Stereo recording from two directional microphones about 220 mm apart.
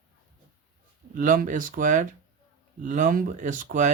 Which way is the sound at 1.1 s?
35° right (ahead or behind).